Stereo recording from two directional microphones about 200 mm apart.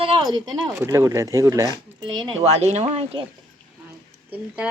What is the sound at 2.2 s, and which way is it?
Speech, 35° right (ahead or behind).